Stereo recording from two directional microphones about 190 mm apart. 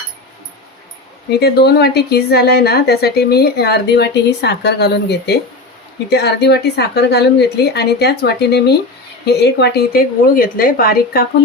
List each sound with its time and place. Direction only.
1.4 s a woman's voice: 60° left (ahead or behind)